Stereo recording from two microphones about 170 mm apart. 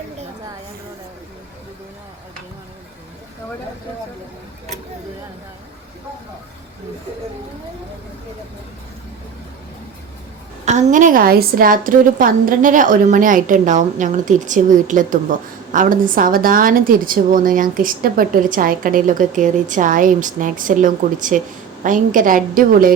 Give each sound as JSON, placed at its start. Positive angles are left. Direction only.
{"t": 10.7, "sound": "a woman's voice", "side_deg": -45}